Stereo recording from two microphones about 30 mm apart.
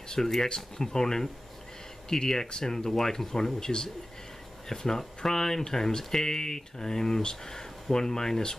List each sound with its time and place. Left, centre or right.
0.1 s speech: centre